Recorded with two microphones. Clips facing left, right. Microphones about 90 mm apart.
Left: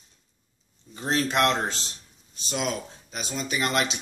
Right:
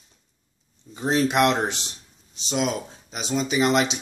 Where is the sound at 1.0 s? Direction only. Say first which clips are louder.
Right 4 dB; 15° right (ahead or behind).